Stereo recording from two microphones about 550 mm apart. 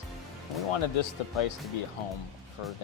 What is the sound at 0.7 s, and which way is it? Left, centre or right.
Speech, left.